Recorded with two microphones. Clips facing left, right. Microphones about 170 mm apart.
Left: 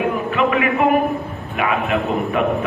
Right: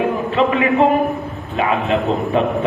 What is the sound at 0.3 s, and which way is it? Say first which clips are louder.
A man's voice: right 4 dB; 30° right (ahead or behind).